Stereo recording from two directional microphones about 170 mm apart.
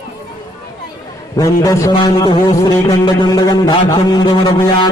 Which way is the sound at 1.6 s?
20° left (ahead or behind).